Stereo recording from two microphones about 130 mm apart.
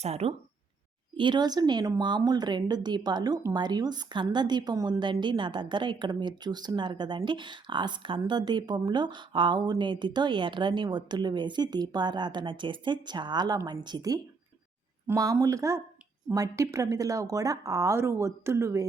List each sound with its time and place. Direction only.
0.0 s speech: 55° right (ahead or behind)
1.1 s a woman's voice: 35° right (ahead or behind)